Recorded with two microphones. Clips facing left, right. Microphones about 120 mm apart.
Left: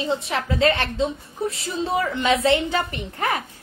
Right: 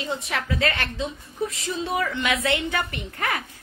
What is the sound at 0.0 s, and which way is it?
A woman's voice, 25° left (ahead or behind).